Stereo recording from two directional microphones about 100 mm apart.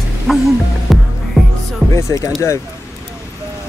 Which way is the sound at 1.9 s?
30° left (ahead or behind).